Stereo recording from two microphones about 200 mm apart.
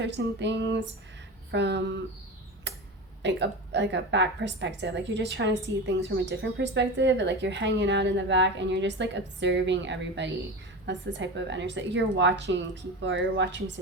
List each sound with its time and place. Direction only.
0.0 s speech: 60° right (ahead or behind)
2.7 s a sound: 60° right (ahead or behind)
3.2 s speech: 60° right (ahead or behind)